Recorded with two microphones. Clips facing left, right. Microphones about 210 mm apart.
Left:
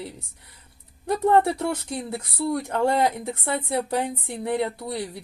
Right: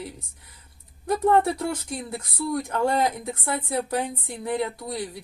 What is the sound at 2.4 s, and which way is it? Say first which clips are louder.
A woman's voice: left 2 dB; 30° left (ahead or behind).